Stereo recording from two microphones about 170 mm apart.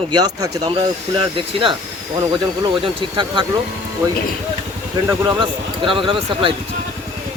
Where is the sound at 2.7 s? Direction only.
30° right (ahead or behind).